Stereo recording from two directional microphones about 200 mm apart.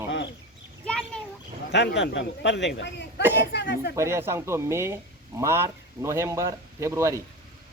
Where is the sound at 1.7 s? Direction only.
60° left (ahead or behind).